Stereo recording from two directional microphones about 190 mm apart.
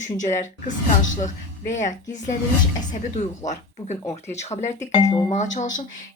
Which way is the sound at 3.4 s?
40° left (ahead or behind).